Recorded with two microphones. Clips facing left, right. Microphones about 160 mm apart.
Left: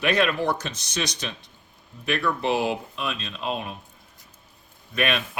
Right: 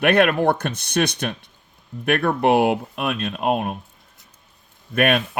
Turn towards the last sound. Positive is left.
turn(degrees=-55)  # may be behind; listen again after turning